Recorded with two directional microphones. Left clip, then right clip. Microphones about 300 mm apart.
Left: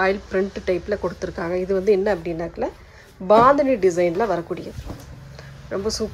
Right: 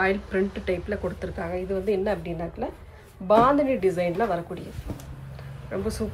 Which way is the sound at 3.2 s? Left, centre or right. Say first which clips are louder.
Left 5 dB; left.